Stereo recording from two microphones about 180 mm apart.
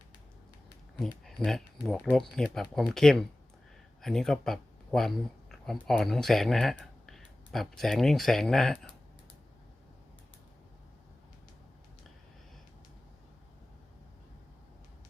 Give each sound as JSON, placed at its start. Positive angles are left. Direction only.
{"t": 0.9, "sound": "speech", "side_deg": 0}